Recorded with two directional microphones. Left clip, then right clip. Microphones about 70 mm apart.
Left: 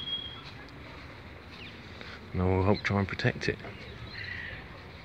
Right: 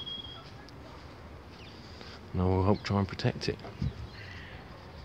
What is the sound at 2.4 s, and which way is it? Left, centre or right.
Speech, right.